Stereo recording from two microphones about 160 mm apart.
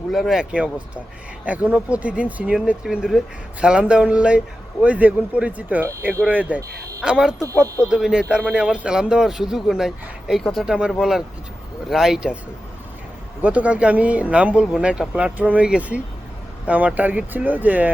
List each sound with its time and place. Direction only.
0.1 s speech: centre (ahead or behind)
7.3 s speech: 20° right (ahead or behind)
7.9 s speech: 5° right (ahead or behind)
13.4 s speech: 10° right (ahead or behind)